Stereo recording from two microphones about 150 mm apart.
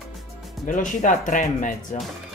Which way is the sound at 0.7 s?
60° left (ahead or behind).